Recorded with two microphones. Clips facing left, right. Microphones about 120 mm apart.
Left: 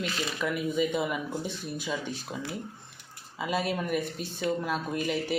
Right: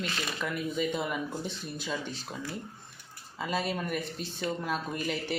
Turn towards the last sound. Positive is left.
turn(degrees=0)  # may be behind; listen again after turning